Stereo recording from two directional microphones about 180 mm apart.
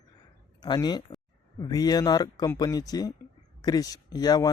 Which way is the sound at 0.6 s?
25° left (ahead or behind).